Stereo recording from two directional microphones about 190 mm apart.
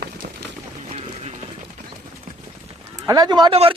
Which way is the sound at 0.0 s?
55° right (ahead or behind).